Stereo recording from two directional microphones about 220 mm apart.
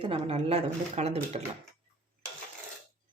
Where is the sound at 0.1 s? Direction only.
25° right (ahead or behind).